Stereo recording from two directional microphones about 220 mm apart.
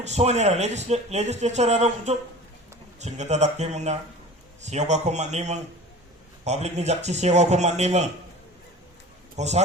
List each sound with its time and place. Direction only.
0.0 s speech: 30° right (ahead or behind)
9.4 s speech: 30° right (ahead or behind)